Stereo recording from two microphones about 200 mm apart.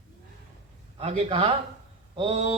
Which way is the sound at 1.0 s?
30° right (ahead or behind).